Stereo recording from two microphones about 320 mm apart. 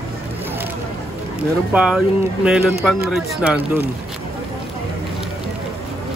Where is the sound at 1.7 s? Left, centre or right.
Centre.